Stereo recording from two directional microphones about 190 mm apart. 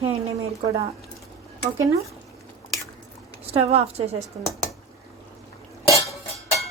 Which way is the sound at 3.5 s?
35° right (ahead or behind).